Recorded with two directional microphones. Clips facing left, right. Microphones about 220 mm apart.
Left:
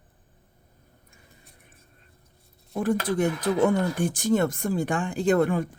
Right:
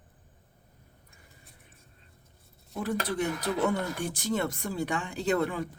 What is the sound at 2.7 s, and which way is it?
Speech, 50° left (ahead or behind).